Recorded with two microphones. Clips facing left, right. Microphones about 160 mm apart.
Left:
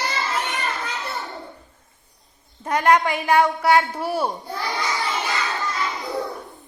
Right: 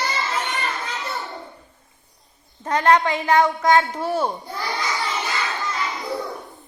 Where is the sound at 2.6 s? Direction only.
10° left (ahead or behind).